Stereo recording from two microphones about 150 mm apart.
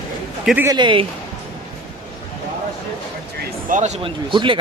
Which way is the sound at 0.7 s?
30° right (ahead or behind).